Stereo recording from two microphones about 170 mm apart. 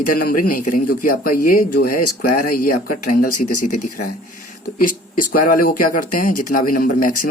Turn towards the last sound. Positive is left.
turn(degrees=55)  # may be behind; listen again after turning